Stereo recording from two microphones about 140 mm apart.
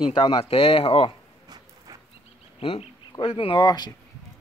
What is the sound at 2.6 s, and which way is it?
Speech, 40° left (ahead or behind).